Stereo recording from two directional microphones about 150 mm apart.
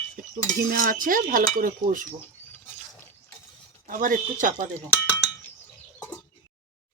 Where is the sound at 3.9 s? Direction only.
65° right (ahead or behind).